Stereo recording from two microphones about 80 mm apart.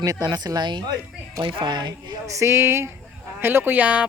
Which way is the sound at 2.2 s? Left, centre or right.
Right.